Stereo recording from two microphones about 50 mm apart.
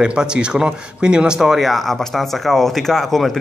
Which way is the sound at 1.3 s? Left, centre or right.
Centre.